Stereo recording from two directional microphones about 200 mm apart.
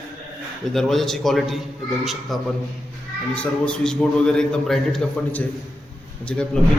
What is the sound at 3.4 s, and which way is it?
A man's voice, 5° left (ahead or behind).